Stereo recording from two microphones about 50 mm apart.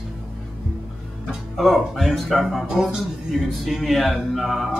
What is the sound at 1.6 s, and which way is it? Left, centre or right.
Speech, centre.